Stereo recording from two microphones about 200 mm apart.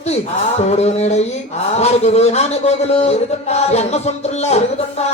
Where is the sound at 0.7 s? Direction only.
30° left (ahead or behind).